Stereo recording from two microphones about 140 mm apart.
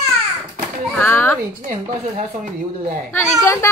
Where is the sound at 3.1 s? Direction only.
20° left (ahead or behind).